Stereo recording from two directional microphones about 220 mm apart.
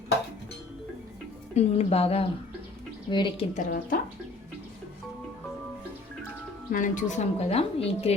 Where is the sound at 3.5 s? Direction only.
35° left (ahead or behind).